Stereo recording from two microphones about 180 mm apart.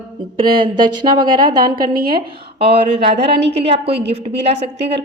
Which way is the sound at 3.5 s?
35° right (ahead or behind).